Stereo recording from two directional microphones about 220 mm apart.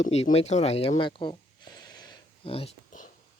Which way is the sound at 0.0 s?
30° left (ahead or behind).